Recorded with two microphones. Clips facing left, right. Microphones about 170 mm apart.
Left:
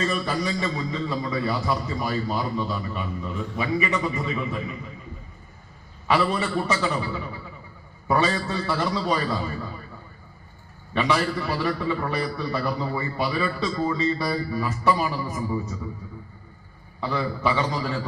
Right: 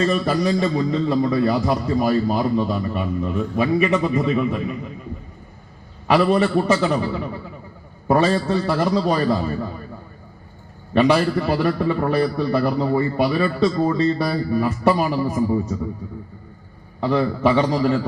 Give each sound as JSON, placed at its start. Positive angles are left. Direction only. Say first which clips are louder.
{"t": 0.0, "sound": "a man's voice", "louder": "right 7 dB", "side_deg": -50}
{"t": 6.1, "sound": "a man's voice", "louder": "right 7 dB", "side_deg": -55}
{"t": 10.9, "sound": "a man's voice", "louder": "right 7 dB", "side_deg": -55}
{"t": 17.0, "sound": "a man's voice", "louder": "right 7 dB", "side_deg": -55}